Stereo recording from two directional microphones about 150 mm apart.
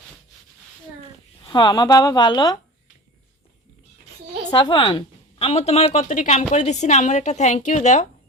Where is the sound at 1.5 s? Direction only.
30° left (ahead or behind).